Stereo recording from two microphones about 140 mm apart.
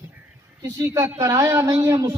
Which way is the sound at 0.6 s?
20° right (ahead or behind).